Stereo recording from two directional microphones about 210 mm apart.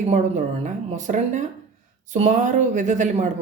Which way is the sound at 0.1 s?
35° right (ahead or behind).